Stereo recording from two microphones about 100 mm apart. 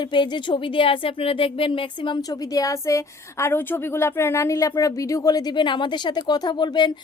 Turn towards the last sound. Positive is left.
turn(degrees=45)  # may be behind; listen again after turning